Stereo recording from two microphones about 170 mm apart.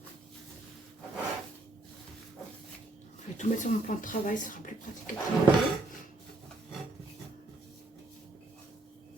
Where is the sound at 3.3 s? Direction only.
50° left (ahead or behind).